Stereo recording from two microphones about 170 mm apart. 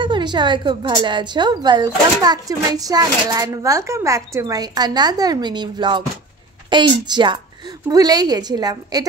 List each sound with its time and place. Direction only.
0.0 s a woman's voice: 25° right (ahead or behind)